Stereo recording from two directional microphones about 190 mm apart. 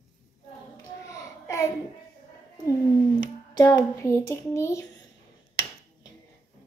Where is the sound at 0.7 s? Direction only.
15° left (ahead or behind).